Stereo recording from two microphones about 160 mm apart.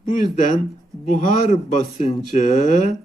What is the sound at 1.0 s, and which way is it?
Speech, 50° left (ahead or behind).